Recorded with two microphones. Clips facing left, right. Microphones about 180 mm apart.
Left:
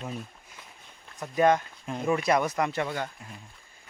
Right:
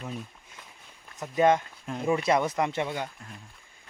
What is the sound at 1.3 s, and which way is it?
Speech, 20° right (ahead or behind).